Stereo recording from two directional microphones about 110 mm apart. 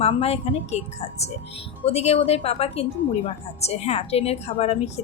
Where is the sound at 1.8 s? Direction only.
70° left (ahead or behind).